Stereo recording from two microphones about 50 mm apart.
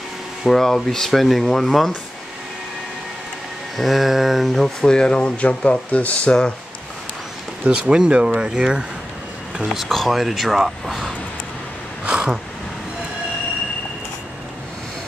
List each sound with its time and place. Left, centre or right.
0.5 s speech: centre
3.7 s speech: centre
4.8 s speech: centre
7.9 s speech: centre
9.7 s speech: centre
12.0 s a sound: right